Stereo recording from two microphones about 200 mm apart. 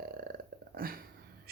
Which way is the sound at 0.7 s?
45° right (ahead or behind).